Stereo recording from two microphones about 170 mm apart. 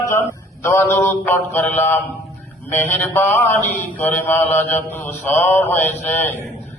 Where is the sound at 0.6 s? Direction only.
15° left (ahead or behind).